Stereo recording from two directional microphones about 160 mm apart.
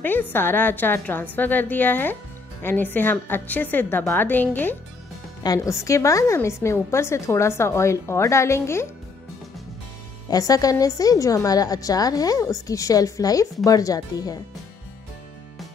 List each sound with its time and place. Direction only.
0.0 s a woman's voice: 10° left (ahead or behind)
10.3 s a woman's voice: 25° left (ahead or behind)